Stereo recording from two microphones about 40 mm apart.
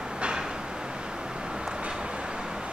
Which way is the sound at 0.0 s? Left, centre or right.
Right.